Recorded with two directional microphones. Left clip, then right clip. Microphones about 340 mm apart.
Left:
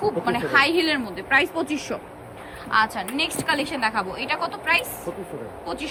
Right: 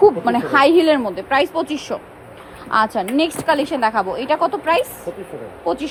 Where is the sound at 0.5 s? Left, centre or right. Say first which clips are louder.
Right 7 dB; centre.